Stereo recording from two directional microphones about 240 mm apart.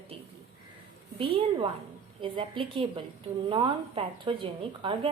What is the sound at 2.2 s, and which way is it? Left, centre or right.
A woman's voice, right.